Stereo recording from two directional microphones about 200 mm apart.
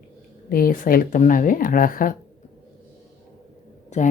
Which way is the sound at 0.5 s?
45° left (ahead or behind).